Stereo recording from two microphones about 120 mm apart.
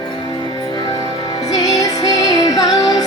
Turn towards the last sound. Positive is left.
turn(degrees=30)  # may be behind; listen again after turning